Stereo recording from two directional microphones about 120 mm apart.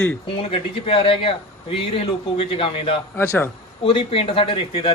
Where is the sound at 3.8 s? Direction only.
50° left (ahead or behind).